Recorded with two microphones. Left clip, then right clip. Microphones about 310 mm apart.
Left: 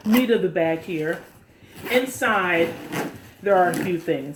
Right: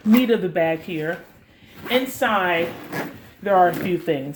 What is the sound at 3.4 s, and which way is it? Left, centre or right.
Speech, right.